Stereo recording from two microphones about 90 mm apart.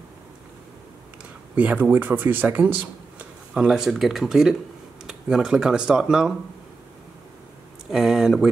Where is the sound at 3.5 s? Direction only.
5° right (ahead or behind).